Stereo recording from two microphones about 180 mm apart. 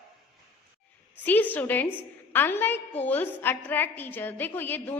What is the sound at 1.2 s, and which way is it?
A woman's voice, 10° left (ahead or behind).